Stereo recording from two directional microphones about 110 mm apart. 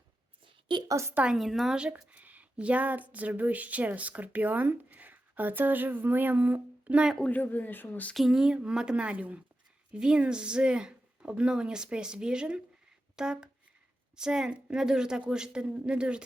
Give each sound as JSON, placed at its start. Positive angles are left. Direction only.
{"t": 0.4, "sound": "a sound", "side_deg": -45}
{"t": 0.9, "sound": "a woman's voice", "side_deg": -25}
{"t": 1.1, "sound": "speech", "side_deg": -10}
{"t": 7.2, "sound": "speech", "side_deg": 15}
{"t": 8.1, "sound": "speech", "side_deg": -5}